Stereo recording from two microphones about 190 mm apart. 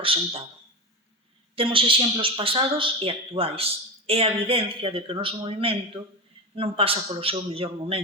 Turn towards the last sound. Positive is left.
turn(degrees=-30)  # may be behind; listen again after turning